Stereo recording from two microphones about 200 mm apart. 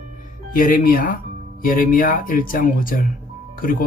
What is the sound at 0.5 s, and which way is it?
Speech, 45° left (ahead or behind).